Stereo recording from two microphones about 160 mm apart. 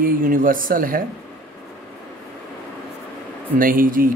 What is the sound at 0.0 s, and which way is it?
Speech, 60° right (ahead or behind).